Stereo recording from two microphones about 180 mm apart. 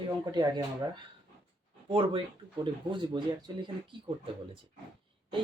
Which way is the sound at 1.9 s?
30° right (ahead or behind).